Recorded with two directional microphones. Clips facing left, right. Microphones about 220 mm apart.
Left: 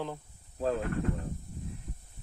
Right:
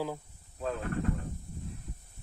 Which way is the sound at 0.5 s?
35° left (ahead or behind).